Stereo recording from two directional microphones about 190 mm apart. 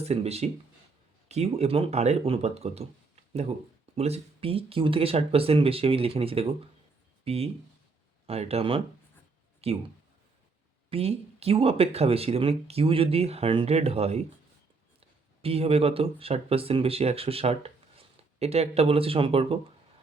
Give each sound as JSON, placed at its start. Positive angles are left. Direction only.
{"t": 0.0, "sound": "speech", "side_deg": -35}
{"t": 3.9, "sound": "speech", "side_deg": -35}
{"t": 10.8, "sound": "speech", "side_deg": -30}
{"t": 15.4, "sound": "speech", "side_deg": -30}